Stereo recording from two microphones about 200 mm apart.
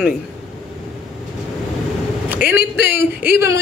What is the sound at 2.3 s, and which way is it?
A man's voice, 50° left (ahead or behind).